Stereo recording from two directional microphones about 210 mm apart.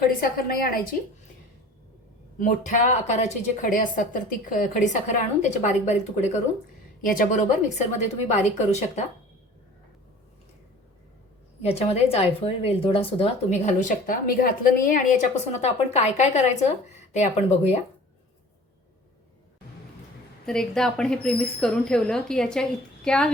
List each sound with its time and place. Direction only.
0.2 s a woman's voice: 45° left (ahead or behind)
2.4 s speech: 35° left (ahead or behind)
11.6 s speech: 30° left (ahead or behind)
20.4 s speech: centre (ahead or behind)